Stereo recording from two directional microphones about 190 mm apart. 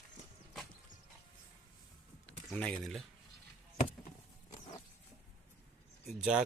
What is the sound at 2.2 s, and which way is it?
Speech, 5° left (ahead or behind).